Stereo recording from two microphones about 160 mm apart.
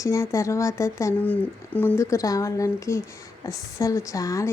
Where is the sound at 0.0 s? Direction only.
20° left (ahead or behind).